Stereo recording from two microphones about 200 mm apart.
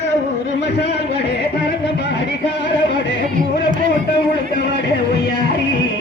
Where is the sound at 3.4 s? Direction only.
45° right (ahead or behind).